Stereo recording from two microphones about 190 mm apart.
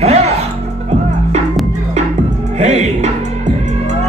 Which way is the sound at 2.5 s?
35° right (ahead or behind).